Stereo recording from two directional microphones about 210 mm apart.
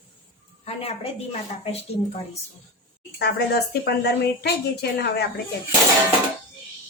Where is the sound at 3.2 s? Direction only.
50° left (ahead or behind).